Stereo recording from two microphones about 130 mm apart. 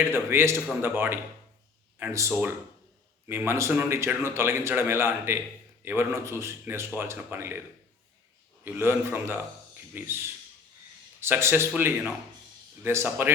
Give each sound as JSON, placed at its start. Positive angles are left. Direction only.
{"t": 0.1, "sound": "a man's voice", "side_deg": -20}
{"t": 8.6, "sound": "a man's voice", "side_deg": -20}